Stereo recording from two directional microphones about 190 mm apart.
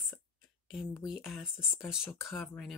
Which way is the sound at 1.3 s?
Centre (ahead or behind).